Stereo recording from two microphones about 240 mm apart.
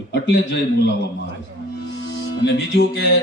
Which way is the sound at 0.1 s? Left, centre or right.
Left.